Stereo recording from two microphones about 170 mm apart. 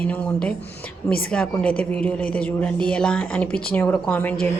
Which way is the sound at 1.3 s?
5° left (ahead or behind).